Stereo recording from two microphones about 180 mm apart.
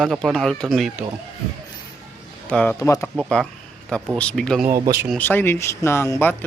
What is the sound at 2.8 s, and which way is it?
Speech, 15° left (ahead or behind).